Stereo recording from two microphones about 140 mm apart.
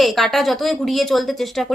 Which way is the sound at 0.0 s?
Centre (ahead or behind).